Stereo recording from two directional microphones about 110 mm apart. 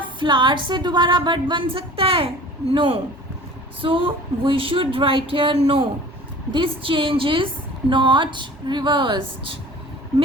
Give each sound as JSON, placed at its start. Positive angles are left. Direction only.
{"t": 0.0, "sound": "a man's voice", "side_deg": -45}